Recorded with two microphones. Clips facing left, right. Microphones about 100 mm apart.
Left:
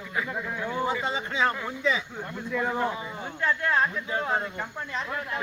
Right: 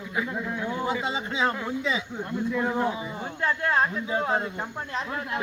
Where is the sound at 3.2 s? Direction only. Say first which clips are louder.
Even; 35° right (ahead or behind).